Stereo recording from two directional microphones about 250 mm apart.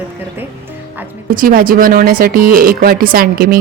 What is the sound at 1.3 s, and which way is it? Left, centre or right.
Speech, right.